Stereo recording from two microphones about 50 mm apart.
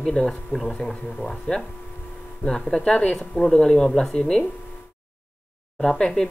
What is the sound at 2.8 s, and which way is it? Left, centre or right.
Speech, left.